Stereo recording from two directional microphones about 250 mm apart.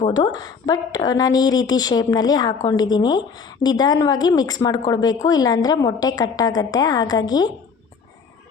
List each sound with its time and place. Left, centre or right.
0.1 s a woman's voice: centre